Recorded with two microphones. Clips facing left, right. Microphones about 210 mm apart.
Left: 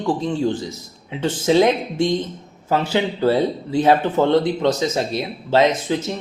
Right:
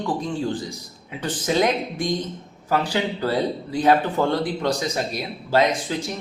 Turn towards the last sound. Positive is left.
turn(degrees=25)  # may be behind; listen again after turning